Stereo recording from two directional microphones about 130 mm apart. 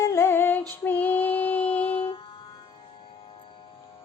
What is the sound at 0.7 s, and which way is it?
Female singing, 15° left (ahead or behind).